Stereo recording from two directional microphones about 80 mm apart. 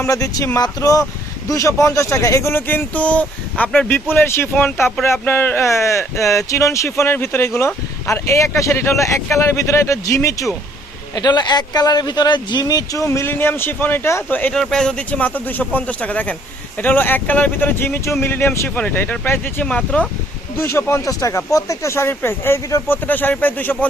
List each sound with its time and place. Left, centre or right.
0.1 s speech: left
11.1 s speech: left
12.6 s speech: left
13.1 s speech: left
14.5 s speech: centre; by 18.7 s left
18.7 s speech: left
19.6 s speech: centre
20.6 s speech: left
21.0 s speech: left